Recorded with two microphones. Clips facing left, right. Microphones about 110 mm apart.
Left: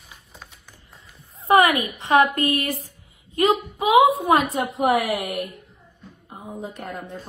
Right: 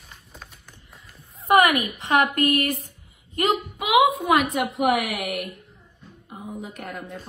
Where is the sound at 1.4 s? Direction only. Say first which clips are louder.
Left 1 dB; 30° left (ahead or behind).